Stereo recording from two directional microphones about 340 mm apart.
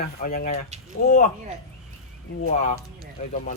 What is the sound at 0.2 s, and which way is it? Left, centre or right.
Speech, left.